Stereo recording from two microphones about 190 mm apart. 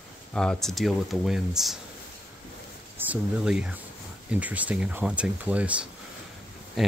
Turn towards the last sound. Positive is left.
turn(degrees=0)  # may be behind; listen again after turning